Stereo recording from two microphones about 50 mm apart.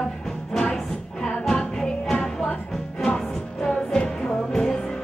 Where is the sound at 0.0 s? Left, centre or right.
Centre.